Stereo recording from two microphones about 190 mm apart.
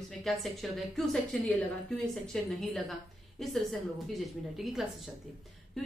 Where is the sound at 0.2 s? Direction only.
Centre (ahead or behind).